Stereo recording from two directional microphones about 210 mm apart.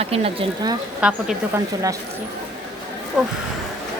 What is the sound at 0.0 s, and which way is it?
Speech, 25° right (ahead or behind).